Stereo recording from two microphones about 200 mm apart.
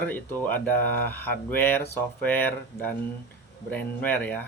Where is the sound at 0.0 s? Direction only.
10° left (ahead or behind).